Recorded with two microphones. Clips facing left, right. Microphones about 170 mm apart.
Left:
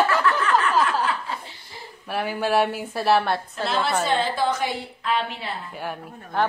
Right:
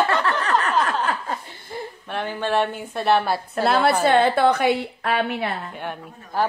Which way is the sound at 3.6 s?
60° right (ahead or behind).